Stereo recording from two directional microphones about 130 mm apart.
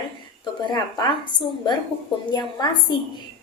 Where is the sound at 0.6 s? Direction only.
35° left (ahead or behind).